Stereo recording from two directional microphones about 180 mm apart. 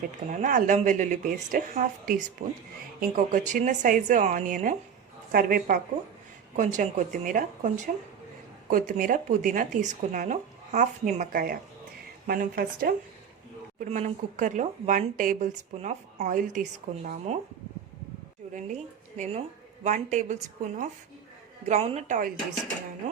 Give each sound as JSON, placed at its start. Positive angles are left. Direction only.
{"t": 0.3, "sound": "speech", "side_deg": -45}
{"t": 13.7, "sound": "speech", "side_deg": -40}
{"t": 18.5, "sound": "a woman's voice", "side_deg": -40}